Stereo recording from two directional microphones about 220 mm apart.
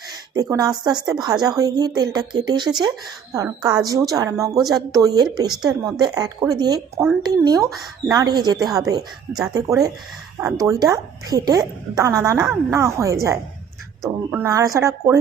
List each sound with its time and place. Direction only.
0.3 s a woman's voice: 15° right (ahead or behind)